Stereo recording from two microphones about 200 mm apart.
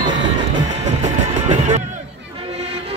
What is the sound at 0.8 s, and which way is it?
Music, 35° right (ahead or behind).